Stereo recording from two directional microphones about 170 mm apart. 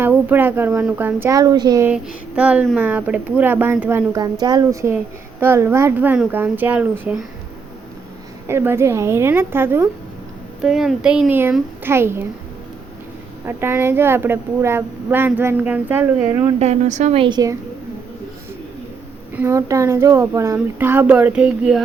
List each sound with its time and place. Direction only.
0.0 s a woman's voice: 10° right (ahead or behind)
1.9 s a woman's voice: 10° right (ahead or behind)
8.4 s a woman's voice: 15° right (ahead or behind)
10.6 s a woman's voice: centre (ahead or behind)
13.4 s a woman's voice: 15° right (ahead or behind)
16.6 s a woman's voice: 40° right (ahead or behind); by 17.6 s 20° right (ahead or behind)
19.4 s a woman's voice: 15° right (ahead or behind)